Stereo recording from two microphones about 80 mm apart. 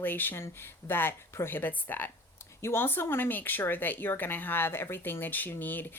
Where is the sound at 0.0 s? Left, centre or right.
Left.